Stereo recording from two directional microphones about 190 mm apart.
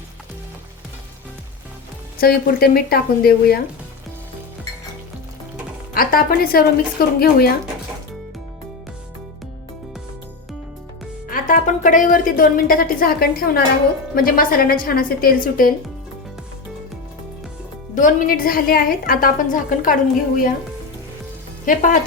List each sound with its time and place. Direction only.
2.2 s a woman's voice: 55° left (ahead or behind)
5.9 s a woman's voice: 50° left (ahead or behind)
11.3 s a woman's voice: 45° left (ahead or behind)
17.9 s a woman's voice: 45° left (ahead or behind)
21.7 s a woman's voice: 45° left (ahead or behind)